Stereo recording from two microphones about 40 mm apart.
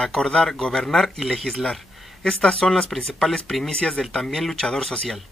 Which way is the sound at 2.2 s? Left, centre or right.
Centre.